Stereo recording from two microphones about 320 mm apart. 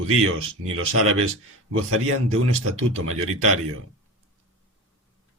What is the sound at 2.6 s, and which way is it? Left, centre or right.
Speech, right.